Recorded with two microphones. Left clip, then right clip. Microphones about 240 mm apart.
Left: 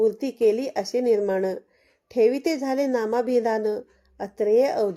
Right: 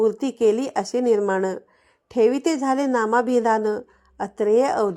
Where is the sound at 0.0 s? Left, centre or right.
Centre.